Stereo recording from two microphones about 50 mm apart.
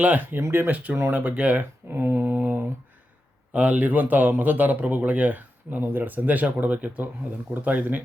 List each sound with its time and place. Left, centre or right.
0.3 s speech: right
0.9 s speech: right
1.4 s speech: right
1.9 s mantra: right
3.5 s speech: right